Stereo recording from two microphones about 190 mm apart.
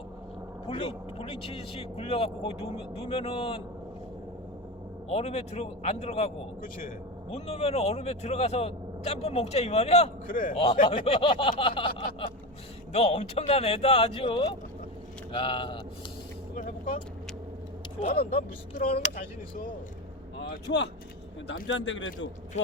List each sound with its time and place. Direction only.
0.7 s speech: 30° left (ahead or behind)
5.0 s speech: 35° left (ahead or behind)
10.6 s speech: 30° left (ahead or behind)
18.1 s speech: 50° left (ahead or behind)
20.5 s speech: 60° left (ahead or behind)
21.4 s a man's voice: 80° left